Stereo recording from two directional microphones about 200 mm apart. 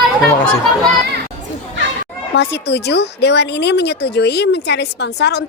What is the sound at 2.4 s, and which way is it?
Speech, 55° left (ahead or behind).